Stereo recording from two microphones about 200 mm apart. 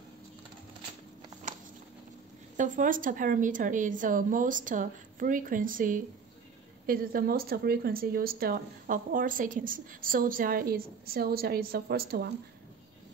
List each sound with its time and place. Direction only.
2.5 s a woman's voice: 40° right (ahead or behind)